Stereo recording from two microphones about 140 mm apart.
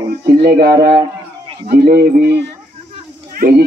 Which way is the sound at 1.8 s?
90° right.